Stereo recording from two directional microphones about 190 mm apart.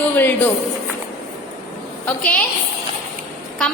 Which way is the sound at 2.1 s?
5° left (ahead or behind).